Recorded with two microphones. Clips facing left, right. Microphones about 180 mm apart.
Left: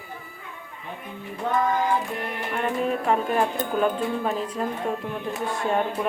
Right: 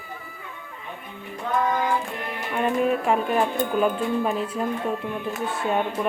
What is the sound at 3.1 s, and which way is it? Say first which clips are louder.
A woman's voice: right 1 dB; 5° right (ahead or behind).